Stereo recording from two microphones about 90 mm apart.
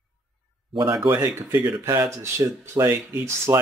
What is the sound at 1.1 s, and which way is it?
Speech, 25° right (ahead or behind).